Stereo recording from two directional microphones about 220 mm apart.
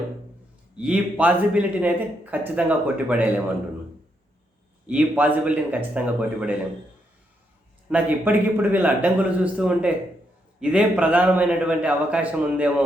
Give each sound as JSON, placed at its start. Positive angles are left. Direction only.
{"t": 0.8, "sound": "speech", "side_deg": -5}
{"t": 4.9, "sound": "a man's voice", "side_deg": -5}
{"t": 7.9, "sound": "a man's voice", "side_deg": -5}